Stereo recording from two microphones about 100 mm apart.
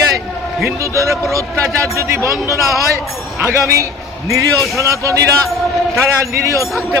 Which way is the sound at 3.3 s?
25° right (ahead or behind).